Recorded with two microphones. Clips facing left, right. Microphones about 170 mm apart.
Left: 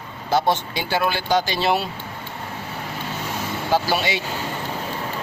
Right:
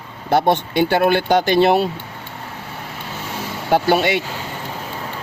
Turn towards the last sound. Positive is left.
turn(degrees=-55)  # may be behind; listen again after turning